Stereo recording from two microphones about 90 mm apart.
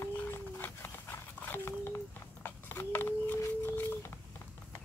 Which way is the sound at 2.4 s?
20° left (ahead or behind).